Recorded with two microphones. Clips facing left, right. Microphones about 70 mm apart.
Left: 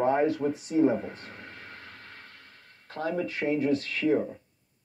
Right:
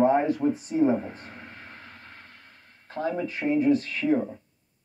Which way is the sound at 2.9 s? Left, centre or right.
Right.